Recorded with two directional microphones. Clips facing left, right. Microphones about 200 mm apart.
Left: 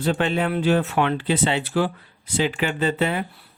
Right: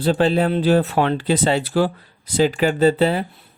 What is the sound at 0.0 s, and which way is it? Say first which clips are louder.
Speech: right 5 dB; 35° right (ahead or behind).